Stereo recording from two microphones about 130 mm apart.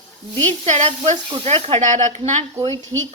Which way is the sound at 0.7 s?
60° right (ahead or behind).